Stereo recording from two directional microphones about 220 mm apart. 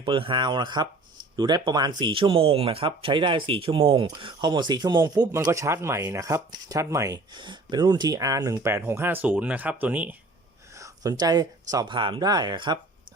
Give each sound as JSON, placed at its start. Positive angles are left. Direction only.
{"t": 0.0, "sound": "speech", "side_deg": -20}